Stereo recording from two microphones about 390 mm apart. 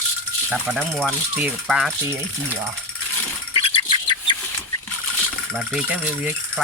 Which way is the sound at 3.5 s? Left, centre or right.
Centre.